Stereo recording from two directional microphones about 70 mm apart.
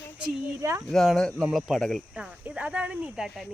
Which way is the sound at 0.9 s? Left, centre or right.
Centre.